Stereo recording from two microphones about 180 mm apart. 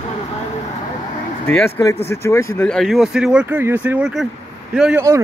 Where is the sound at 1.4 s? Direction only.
15° left (ahead or behind).